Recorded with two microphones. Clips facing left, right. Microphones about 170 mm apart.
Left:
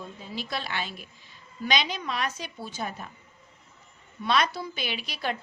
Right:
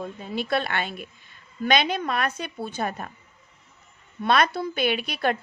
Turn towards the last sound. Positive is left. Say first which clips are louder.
# right 8 dB
turn(degrees=-55)  # may be behind; listen again after turning